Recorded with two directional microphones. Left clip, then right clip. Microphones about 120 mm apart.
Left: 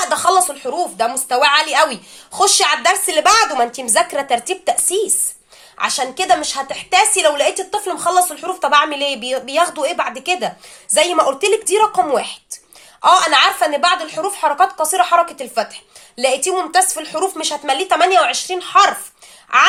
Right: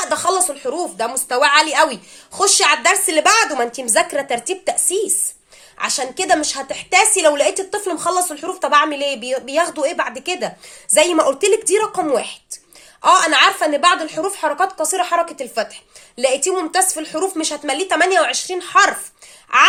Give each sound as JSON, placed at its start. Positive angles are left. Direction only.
{"t": 0.0, "sound": "a woman's voice", "side_deg": -35}
{"t": 10.9, "sound": "a woman's voice", "side_deg": -45}